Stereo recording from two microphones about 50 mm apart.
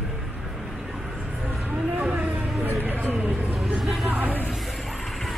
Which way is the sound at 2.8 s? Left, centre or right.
Right.